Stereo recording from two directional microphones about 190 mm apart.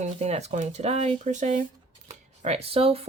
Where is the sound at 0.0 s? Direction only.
35° right (ahead or behind).